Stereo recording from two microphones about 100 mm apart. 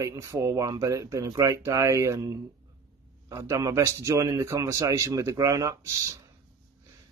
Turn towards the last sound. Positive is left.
turn(degrees=-30)  # may be behind; listen again after turning